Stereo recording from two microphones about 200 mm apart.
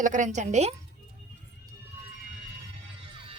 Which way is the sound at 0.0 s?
40° right (ahead or behind).